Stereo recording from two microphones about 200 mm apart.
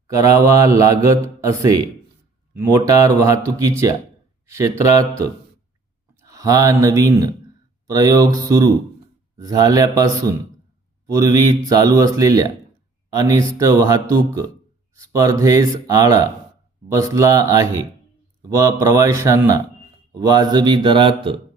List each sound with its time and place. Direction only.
0.1 s mantra: 15° right (ahead or behind)
4.4 s speech: 15° right (ahead or behind)
4.9 s mantra: 15° right (ahead or behind)
6.2 s speech: 15° right (ahead or behind)
7.9 s mantra: 20° right (ahead or behind)
20.1 s a man's voice: 20° right (ahead or behind)